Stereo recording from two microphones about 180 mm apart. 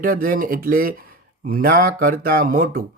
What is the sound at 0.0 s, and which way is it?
Speech, 50° right (ahead or behind).